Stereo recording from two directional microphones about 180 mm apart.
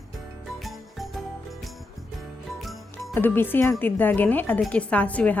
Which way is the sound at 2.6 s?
Centre (ahead or behind).